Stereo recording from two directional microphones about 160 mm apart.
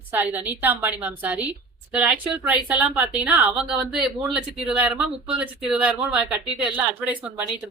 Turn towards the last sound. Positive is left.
turn(degrees=-10)  # may be behind; listen again after turning